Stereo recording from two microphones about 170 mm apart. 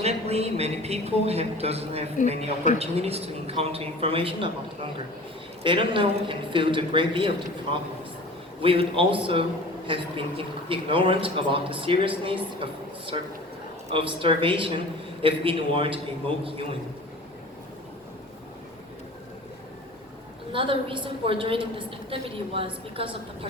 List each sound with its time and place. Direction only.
0.0 s a woman's voice: 40° right (ahead or behind)
20.5 s a woman's voice: 30° right (ahead or behind)